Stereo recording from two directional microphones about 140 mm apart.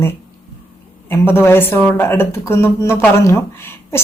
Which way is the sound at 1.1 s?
15° left (ahead or behind).